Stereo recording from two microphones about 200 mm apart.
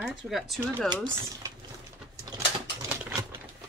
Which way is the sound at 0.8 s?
20° right (ahead or behind).